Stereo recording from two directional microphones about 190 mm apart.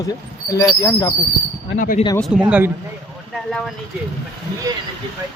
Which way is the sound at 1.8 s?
45° left (ahead or behind).